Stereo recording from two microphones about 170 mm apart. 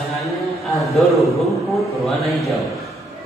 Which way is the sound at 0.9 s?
Centre (ahead or behind).